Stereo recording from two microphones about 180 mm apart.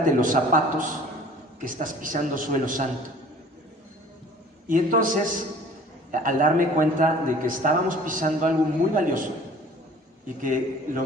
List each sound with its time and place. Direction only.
0.0 s a man's voice: 50° right (ahead or behind)
4.6 s a man's voice: 50° right (ahead or behind)